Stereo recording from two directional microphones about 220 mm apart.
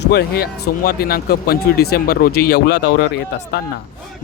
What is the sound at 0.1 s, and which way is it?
Speech, 45° left (ahead or behind).